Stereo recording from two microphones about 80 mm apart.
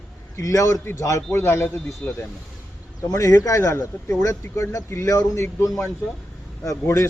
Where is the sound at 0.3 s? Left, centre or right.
Left.